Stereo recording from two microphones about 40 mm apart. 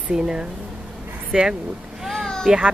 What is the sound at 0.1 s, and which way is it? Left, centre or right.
Speech, right.